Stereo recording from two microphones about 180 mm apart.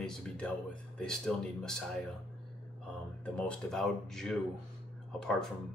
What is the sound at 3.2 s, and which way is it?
Speech, 5° left (ahead or behind).